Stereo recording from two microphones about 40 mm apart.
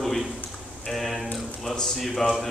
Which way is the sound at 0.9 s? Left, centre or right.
Centre.